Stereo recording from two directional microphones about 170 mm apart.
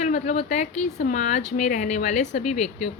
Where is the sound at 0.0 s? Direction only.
45° left (ahead or behind).